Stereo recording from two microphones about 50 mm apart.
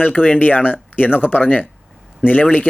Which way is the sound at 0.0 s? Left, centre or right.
Left.